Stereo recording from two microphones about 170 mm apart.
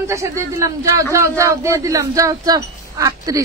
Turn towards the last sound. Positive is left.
turn(degrees=-20)  # may be behind; listen again after turning